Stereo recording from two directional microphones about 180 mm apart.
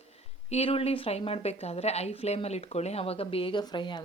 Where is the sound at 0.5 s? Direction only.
30° left (ahead or behind).